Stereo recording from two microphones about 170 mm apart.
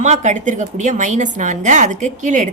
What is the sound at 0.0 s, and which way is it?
A woman's voice, 45° right (ahead or behind).